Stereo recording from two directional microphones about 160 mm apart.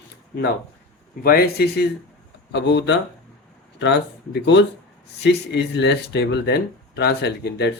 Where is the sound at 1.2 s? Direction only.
75° left (ahead or behind).